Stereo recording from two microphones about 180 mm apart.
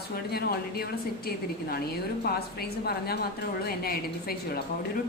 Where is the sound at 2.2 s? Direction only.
60° left (ahead or behind).